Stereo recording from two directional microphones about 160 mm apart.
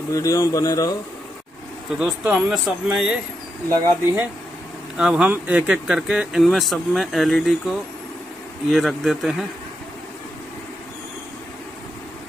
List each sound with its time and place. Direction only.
0.1 s speech: 20° left (ahead or behind)
2.0 s speech: 5° right (ahead or behind)
3.7 s speech: 20° right (ahead or behind)
4.9 s speech: 5° right (ahead or behind)